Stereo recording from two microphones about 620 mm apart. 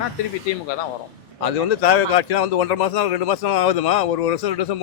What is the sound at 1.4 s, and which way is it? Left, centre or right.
A man's voice, left.